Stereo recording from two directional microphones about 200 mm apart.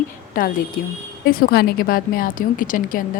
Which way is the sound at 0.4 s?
45° left (ahead or behind).